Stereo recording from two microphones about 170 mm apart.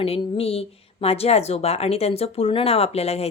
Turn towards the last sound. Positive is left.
turn(degrees=35)  # may be behind; listen again after turning